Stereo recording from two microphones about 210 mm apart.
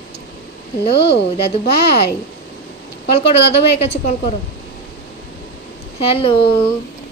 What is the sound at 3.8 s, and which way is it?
Speech, 30° left (ahead or behind).